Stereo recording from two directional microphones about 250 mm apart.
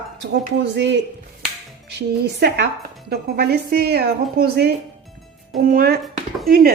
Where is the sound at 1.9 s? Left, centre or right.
Right.